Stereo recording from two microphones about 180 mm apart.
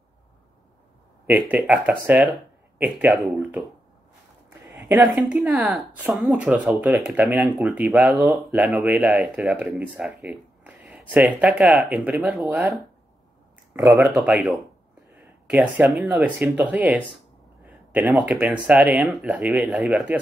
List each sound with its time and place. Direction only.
1.5 s speech: 5° right (ahead or behind)
4.6 s a sound: 10° right (ahead or behind)
5.3 s speech: centre (ahead or behind)
7.2 s speech: 15° right (ahead or behind)
7.5 s speech: centre (ahead or behind)
8.1 s speech: 15° right (ahead or behind)
8.4 s speech: centre (ahead or behind)
13.7 s speech: 15° right (ahead or behind)
14.1 s speech: centre (ahead or behind)
17.6 s a sound: 10° right (ahead or behind)
18.3 s speech: 5° right (ahead or behind)